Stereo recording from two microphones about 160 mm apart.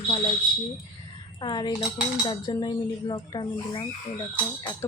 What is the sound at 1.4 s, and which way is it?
Speech, 30° left (ahead or behind).